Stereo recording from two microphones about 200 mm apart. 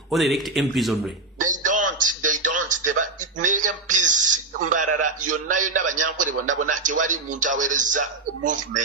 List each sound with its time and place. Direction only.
0.1 s speech: centre (ahead or behind)
1.4 s a sound: 40° right (ahead or behind)
6.8 s speech: 40° right (ahead or behind)